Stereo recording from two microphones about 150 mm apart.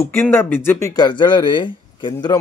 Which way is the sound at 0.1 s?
15° left (ahead or behind).